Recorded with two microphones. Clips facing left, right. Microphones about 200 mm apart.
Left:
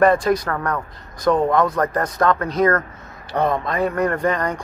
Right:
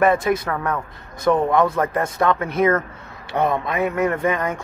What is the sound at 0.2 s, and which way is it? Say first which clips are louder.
Speech: left 1 dB; 25° right (ahead or behind).